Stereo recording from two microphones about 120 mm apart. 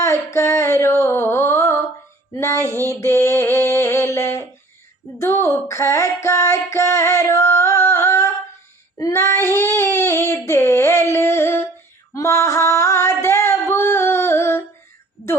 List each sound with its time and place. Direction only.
0.0 s a sound: 25° left (ahead or behind)
9.0 s child singing: 25° left (ahead or behind)
12.1 s female singing: 25° left (ahead or behind)